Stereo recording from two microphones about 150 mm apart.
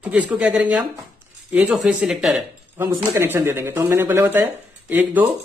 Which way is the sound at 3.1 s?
15° right (ahead or behind).